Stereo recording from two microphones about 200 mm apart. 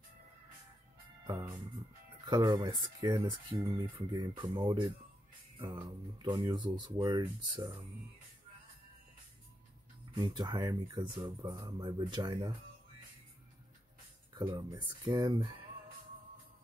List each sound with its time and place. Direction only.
2.2 s speech: 20° right (ahead or behind)
10.1 s speech: 20° right (ahead or behind)
14.3 s speech: 20° right (ahead or behind)